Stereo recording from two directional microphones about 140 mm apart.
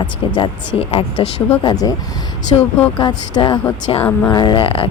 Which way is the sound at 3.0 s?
30° left (ahead or behind).